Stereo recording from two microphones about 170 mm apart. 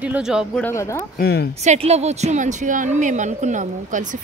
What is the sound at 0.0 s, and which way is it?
Speech, 5° right (ahead or behind).